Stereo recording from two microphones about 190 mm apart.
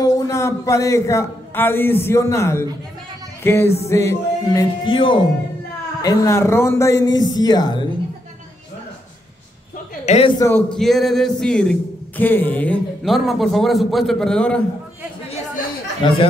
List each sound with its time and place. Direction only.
0.0 s a man's voice: 15° left (ahead or behind)
3.4 s music: 10° left (ahead or behind)
3.9 s speech: 15° left (ahead or behind)
10.0 s a man's voice: 35° left (ahead or behind)
10.8 s a man's voice: centre (ahead or behind)
15.2 s chatter: 35° left (ahead or behind)